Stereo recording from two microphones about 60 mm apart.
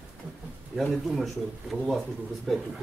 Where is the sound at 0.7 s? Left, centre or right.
Centre.